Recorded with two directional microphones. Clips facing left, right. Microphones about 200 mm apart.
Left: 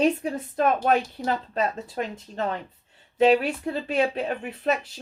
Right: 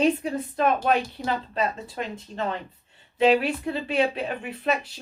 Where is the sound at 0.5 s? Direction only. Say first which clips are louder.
Left 1 dB; 45° left (ahead or behind).